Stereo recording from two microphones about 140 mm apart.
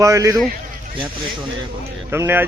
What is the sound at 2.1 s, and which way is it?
Speech, 15° right (ahead or behind).